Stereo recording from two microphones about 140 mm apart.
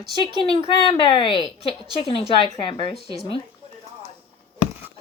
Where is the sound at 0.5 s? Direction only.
40° left (ahead or behind).